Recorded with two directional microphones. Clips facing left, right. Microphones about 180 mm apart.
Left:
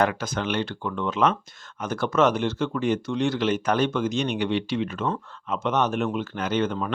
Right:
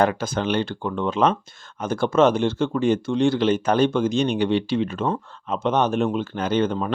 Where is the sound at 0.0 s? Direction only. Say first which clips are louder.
Right 3 dB; 30° right (ahead or behind).